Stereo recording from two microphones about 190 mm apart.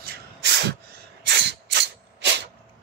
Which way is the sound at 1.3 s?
65° right (ahead or behind).